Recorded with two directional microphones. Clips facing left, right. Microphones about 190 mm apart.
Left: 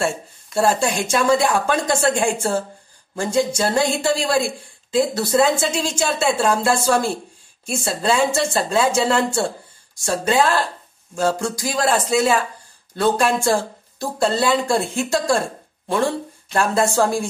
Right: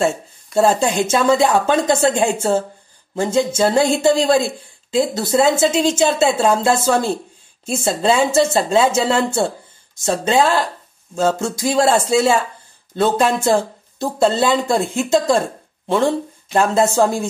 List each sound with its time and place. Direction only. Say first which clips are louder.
0.6 s speech: right 4 dB; 20° right (ahead or behind)